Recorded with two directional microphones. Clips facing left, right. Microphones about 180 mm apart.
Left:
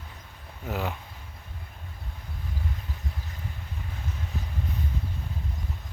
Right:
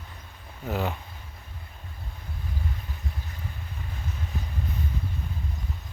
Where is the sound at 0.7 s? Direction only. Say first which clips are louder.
Right 2 dB; centre (ahead or behind).